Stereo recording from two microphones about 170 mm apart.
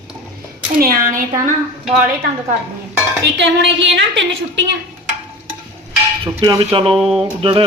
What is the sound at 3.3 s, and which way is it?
Speech, 90° right.